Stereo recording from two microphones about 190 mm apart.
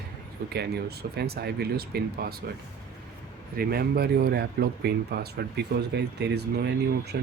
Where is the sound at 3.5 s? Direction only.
50° right (ahead or behind).